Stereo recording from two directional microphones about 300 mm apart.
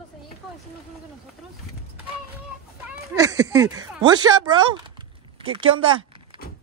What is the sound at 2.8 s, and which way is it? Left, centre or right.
Speech, centre.